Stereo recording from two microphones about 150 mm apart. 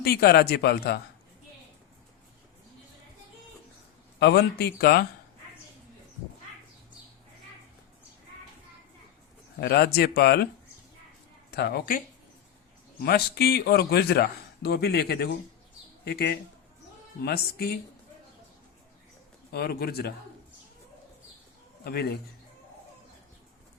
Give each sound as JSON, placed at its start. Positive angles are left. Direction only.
{"t": 0.0, "sound": "a man's voice", "side_deg": 90}
{"t": 4.2, "sound": "a man's voice", "side_deg": 90}
{"t": 9.6, "sound": "a man's voice", "side_deg": 90}
{"t": 11.5, "sound": "a man's voice", "side_deg": 90}
{"t": 13.1, "sound": "a man's voice", "side_deg": 90}
{"t": 19.5, "sound": "a man's voice", "side_deg": 90}
{"t": 21.8, "sound": "a man's voice", "side_deg": 90}